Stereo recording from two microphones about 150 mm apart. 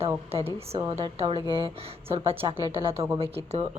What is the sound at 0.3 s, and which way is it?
Speech, 40° right (ahead or behind).